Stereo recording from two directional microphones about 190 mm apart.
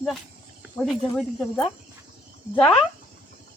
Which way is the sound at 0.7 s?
Centre (ahead or behind).